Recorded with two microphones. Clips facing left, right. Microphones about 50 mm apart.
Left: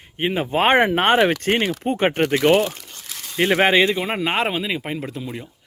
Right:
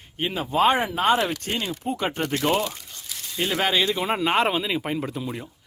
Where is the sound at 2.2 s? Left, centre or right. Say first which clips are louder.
Left 7 dB; left.